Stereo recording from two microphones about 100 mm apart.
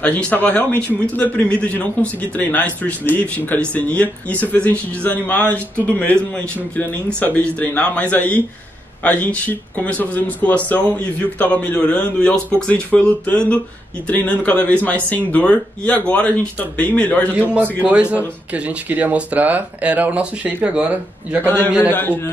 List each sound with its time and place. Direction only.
0.0 s a man's voice: 10° left (ahead or behind)
18.1 s speech: 15° right (ahead or behind)
21.5 s a man's voice: 20° left (ahead or behind)